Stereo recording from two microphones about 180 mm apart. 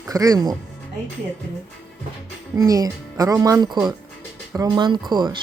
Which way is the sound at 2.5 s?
20° right (ahead or behind).